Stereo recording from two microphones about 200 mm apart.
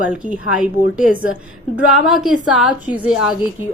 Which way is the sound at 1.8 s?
Centre (ahead or behind).